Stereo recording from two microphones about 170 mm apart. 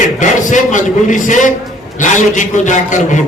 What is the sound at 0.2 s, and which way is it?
A man's voice, 50° left (ahead or behind).